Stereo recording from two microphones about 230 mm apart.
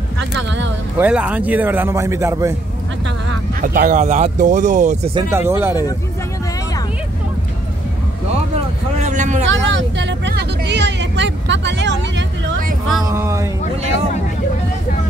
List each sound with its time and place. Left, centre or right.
0.9 s a man's voice: centre
3.6 s speech: right
5.3 s a man's voice: centre
9.0 s vehicle: right
9.5 s vehicle: right
13.0 s a sound: centre